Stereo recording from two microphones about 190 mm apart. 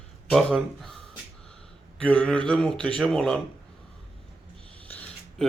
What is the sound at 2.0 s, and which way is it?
Speech, 5° left (ahead or behind).